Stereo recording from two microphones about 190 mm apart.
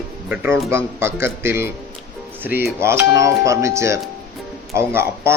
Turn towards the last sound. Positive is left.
turn(degrees=-15)  # may be behind; listen again after turning